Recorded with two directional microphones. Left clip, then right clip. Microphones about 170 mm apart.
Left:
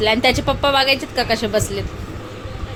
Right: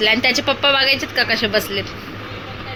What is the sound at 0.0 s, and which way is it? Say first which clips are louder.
A woman's voice: even; 20° left (ahead or behind).